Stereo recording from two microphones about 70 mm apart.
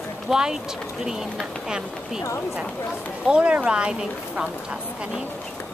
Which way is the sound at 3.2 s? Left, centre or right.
Centre.